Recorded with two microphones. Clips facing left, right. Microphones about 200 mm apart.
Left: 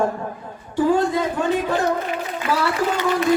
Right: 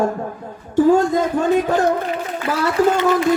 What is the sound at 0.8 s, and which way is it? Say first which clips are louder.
Speech: right 4 dB; 45° right (ahead or behind).